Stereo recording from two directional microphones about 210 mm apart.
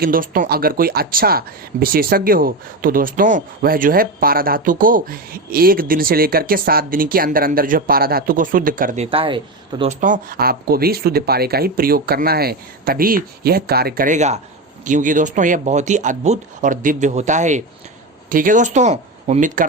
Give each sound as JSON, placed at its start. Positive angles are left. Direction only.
{"t": 0.0, "sound": "speech", "side_deg": -40}
{"t": 9.0, "sound": "speech", "side_deg": -25}
{"t": 9.9, "sound": "speech", "side_deg": -35}